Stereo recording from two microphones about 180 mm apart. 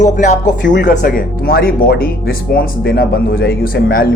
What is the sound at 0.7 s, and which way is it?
Speech, 70° left (ahead or behind).